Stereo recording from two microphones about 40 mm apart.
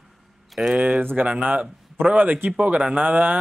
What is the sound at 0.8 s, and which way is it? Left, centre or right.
Speech, right.